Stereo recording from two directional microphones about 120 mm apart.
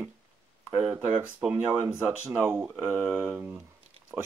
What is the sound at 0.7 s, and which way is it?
Speech, 5° right (ahead or behind).